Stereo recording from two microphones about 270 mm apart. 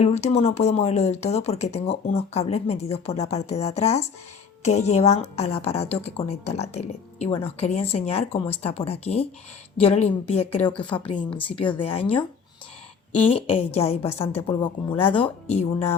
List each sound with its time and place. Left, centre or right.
0.0 s a woman's voice: left
13.7 s a woman's voice: left